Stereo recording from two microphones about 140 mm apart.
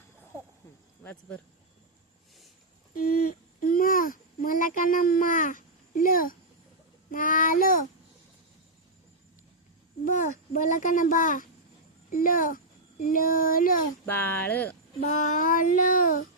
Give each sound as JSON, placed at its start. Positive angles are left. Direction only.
{"t": 1.0, "sound": "speech", "side_deg": 10}
{"t": 3.7, "sound": "a child's voice", "side_deg": 90}
{"t": 7.1, "sound": "speech", "side_deg": 75}
{"t": 10.0, "sound": "a child's voice", "side_deg": 70}
{"t": 14.0, "sound": "speech", "side_deg": 15}
{"t": 15.0, "sound": "speech", "side_deg": 60}